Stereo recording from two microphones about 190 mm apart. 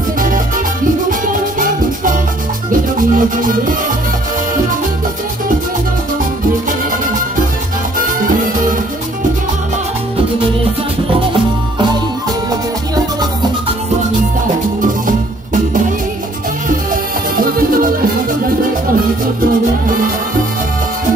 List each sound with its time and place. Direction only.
1.3 s music: 45° right (ahead or behind)